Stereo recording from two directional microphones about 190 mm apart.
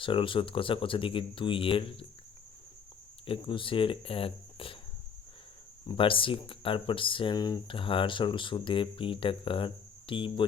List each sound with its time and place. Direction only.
0.0 s speech: 25° left (ahead or behind)
3.2 s speech: 25° left (ahead or behind)
5.8 s speech: 25° left (ahead or behind)